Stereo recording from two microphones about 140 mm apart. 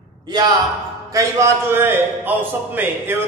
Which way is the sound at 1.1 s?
20° right (ahead or behind).